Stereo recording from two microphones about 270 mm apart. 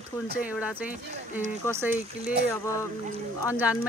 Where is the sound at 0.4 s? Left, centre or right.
Centre.